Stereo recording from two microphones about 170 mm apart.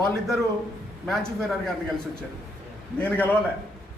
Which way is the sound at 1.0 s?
Centre (ahead or behind).